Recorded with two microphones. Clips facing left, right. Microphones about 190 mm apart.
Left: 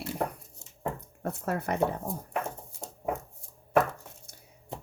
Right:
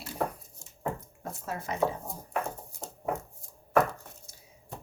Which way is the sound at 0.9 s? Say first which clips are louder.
Left 6 dB; 60° left (ahead or behind).